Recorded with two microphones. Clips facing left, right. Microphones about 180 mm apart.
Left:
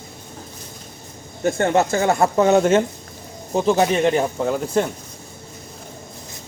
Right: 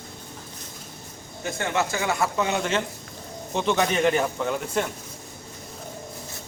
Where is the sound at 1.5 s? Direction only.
50° left (ahead or behind).